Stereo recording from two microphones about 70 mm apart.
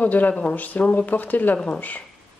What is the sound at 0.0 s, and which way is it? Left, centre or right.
Speech, left.